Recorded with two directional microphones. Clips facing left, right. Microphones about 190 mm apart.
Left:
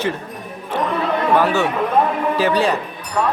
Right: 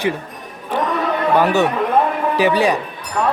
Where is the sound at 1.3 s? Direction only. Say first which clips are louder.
Right 2 dB; 15° right (ahead or behind).